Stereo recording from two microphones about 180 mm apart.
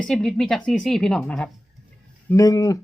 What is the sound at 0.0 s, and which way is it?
Speech, 5° left (ahead or behind).